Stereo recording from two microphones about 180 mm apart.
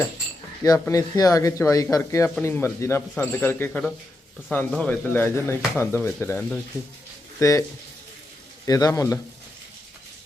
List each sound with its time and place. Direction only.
0.6 s speech: 20° left (ahead or behind)
8.6 s speech: 20° left (ahead or behind)